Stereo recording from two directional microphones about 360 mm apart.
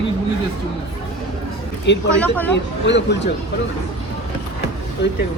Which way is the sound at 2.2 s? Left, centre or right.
Centre.